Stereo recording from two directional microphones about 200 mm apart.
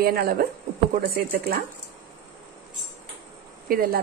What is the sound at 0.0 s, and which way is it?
Speech, 50° right (ahead or behind).